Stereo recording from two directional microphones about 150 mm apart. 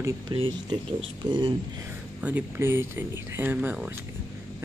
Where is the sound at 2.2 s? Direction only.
15° right (ahead or behind).